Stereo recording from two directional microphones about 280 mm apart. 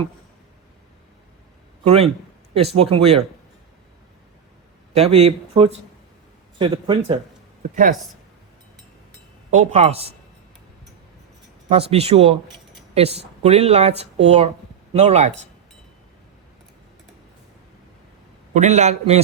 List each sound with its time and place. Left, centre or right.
1.8 s a man's voice: right
4.9 s speech: right
9.5 s speech: right
11.7 s speech: right
18.5 s speech: right